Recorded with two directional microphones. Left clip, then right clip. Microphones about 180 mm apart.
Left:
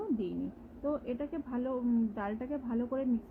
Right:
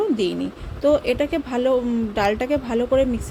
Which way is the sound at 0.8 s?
15° right (ahead or behind).